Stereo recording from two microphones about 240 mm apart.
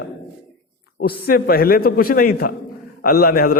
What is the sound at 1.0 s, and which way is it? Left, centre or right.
A man's voice, left.